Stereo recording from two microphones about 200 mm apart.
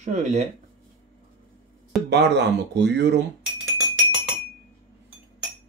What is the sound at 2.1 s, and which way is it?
Speech, 60° right (ahead or behind).